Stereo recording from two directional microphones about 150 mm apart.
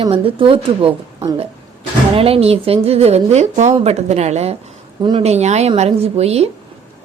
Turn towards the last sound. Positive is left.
turn(degrees=-45)  # may be behind; listen again after turning